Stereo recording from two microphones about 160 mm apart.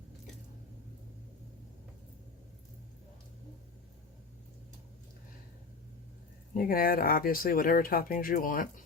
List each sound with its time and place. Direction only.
6.6 s speech: 65° left (ahead or behind)